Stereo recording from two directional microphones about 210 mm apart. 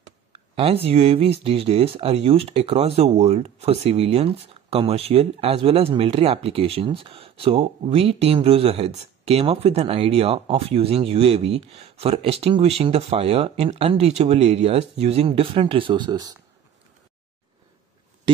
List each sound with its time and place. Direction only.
0.3 s speech: 25° right (ahead or behind)